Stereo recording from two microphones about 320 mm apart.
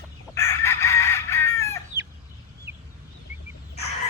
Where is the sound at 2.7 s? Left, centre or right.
Centre.